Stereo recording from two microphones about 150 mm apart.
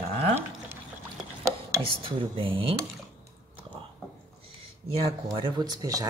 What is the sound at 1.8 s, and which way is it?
Speech, 35° right (ahead or behind).